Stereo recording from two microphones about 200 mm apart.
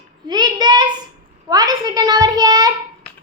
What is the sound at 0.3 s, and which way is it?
Child singing, 20° right (ahead or behind).